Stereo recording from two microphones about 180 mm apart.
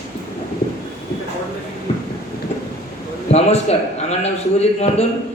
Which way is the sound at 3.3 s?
35° left (ahead or behind).